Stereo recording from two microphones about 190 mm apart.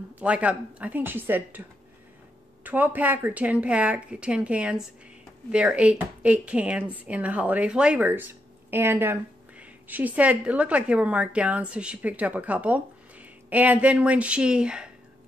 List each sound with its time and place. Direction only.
0.2 s speech: 5° right (ahead or behind)